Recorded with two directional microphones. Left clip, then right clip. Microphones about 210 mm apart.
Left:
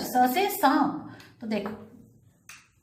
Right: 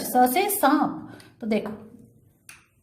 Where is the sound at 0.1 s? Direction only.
55° right (ahead or behind).